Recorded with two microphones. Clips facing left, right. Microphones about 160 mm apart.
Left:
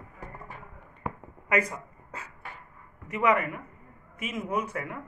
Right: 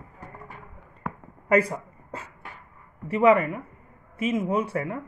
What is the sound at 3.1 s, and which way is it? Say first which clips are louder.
A man's voice: right 6 dB; 30° right (ahead or behind).